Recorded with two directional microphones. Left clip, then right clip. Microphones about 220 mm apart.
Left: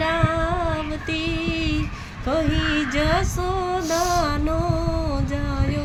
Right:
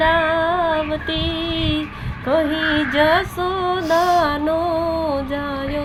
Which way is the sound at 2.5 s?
50° left (ahead or behind).